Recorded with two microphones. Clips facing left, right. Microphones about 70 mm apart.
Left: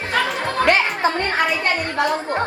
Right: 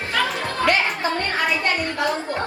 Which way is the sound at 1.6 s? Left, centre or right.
Left.